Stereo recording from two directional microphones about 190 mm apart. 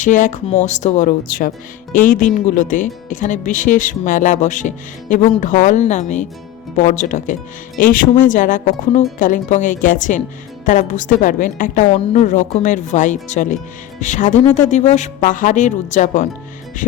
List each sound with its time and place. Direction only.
0.0 s speech: 40° left (ahead or behind)